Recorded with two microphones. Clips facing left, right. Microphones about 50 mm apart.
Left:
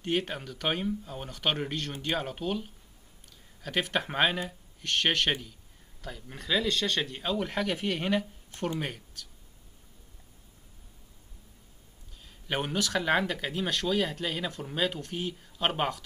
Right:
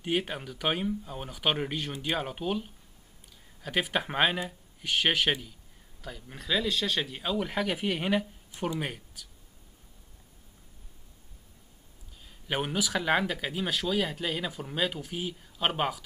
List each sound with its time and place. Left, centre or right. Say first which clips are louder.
0.0 s speech: even; centre
12.4 s speech: even; centre